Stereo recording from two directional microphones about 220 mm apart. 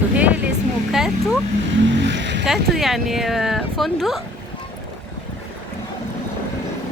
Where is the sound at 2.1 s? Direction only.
55° right (ahead or behind).